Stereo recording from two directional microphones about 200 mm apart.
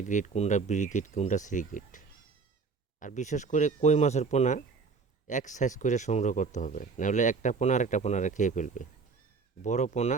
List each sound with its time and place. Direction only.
0.0 s speech: 40° left (ahead or behind)